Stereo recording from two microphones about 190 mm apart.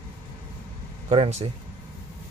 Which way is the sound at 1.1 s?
30° right (ahead or behind).